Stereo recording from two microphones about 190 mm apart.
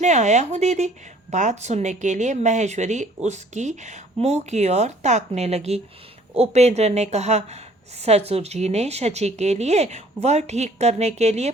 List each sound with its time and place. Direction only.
0.0 s a woman's voice: 40° right (ahead or behind)